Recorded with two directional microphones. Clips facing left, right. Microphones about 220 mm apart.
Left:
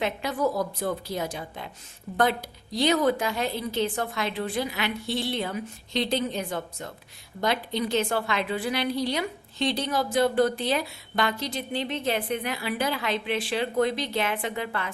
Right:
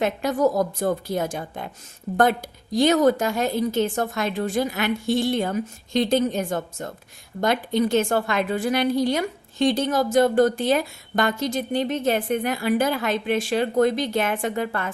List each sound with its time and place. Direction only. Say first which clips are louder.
0.0 s a woman's voice: right 6 dB; 45° right (ahead or behind)